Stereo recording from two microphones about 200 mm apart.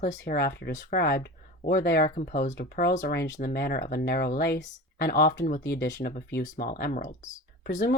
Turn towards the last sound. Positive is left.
turn(degrees=40)  # may be behind; listen again after turning